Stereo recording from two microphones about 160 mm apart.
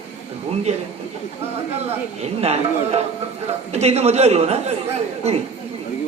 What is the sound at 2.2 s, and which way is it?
A man's voice, 40° right (ahead or behind).